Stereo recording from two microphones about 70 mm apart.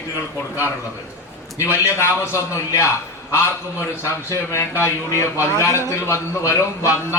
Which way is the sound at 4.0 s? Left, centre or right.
Left.